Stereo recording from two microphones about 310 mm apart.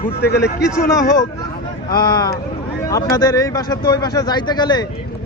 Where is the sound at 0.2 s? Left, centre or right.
Left.